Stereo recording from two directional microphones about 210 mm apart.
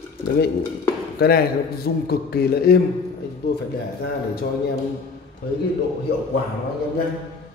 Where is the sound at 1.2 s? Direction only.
45° left (ahead or behind).